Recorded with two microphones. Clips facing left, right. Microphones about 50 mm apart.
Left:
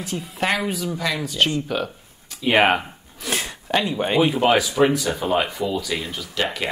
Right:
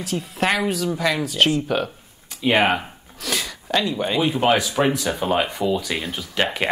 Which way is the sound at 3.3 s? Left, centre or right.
Left.